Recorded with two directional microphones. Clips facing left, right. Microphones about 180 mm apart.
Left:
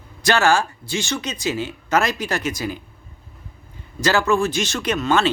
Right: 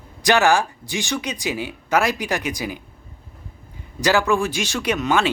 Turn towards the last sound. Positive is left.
turn(degrees=-15)  # may be behind; listen again after turning